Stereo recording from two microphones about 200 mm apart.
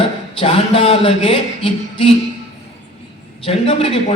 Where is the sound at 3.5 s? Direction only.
25° left (ahead or behind).